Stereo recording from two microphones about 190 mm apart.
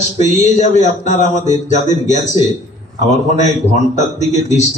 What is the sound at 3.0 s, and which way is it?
A man's voice, 40° left (ahead or behind).